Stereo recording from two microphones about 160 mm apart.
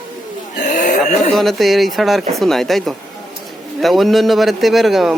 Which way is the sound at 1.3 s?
Centre (ahead or behind).